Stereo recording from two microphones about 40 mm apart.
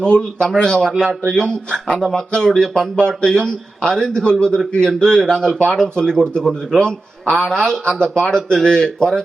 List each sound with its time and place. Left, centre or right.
0.0 s a man's voice: left